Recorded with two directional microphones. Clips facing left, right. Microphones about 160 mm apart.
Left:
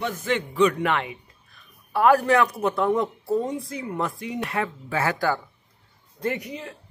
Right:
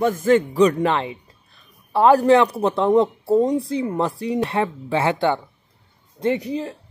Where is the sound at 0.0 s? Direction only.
45° right (ahead or behind).